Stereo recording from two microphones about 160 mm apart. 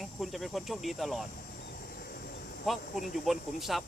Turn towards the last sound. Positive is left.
turn(degrees=0)  # may be behind; listen again after turning